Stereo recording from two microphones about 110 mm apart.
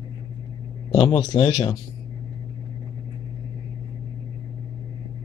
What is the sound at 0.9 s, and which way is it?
Speech, 50° left (ahead or behind).